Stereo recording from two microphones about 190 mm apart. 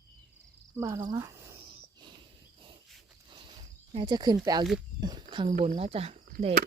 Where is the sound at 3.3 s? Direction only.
25° right (ahead or behind).